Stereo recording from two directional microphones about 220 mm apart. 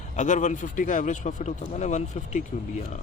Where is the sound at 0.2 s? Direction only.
35° left (ahead or behind).